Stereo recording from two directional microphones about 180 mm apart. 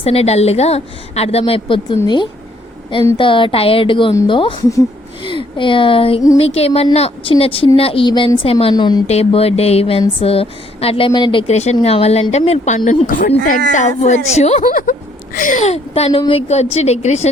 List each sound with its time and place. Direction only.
0.0 s a woman's voice: 35° left (ahead or behind)
4.1 s speech: 15° left (ahead or behind)
4.4 s a woman's voice: 30° left (ahead or behind)
9.0 s a woman's voice: 35° left (ahead or behind)
14.7 s a woman's voice: 50° left (ahead or behind)